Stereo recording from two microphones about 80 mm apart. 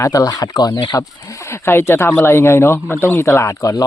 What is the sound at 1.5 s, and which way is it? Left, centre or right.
Speech, left.